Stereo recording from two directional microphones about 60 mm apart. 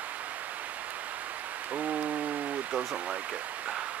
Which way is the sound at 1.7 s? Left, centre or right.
Right.